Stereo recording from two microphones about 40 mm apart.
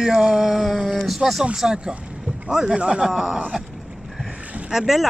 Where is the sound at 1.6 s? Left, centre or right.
Centre.